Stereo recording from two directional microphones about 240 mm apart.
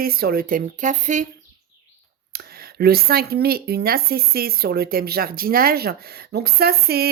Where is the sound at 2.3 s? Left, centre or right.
Right.